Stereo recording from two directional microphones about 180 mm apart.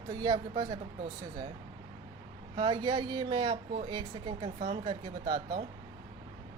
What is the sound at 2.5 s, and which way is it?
Speech, 25° right (ahead or behind).